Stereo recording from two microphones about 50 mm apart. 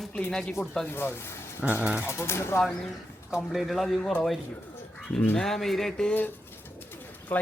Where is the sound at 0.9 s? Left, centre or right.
Left.